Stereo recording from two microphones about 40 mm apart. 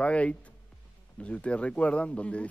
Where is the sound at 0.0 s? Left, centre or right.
Left.